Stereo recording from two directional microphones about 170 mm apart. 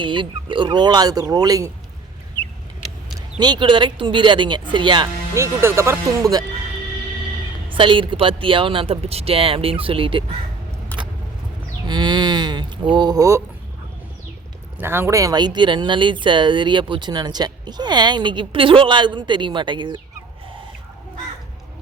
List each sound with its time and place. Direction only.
0.0 s speech: 30° right (ahead or behind)
3.3 s speech: 25° right (ahead or behind)
7.7 s speech: 30° right (ahead or behind)
11.9 s speech: 25° right (ahead or behind)
14.8 s speech: 15° right (ahead or behind)